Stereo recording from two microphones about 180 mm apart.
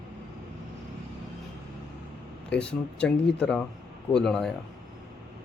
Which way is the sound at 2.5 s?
5° left (ahead or behind).